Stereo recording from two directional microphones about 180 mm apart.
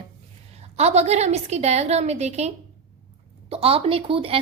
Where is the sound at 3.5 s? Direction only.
35° right (ahead or behind).